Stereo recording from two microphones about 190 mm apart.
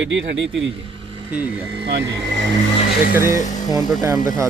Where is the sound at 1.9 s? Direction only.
65° right (ahead or behind).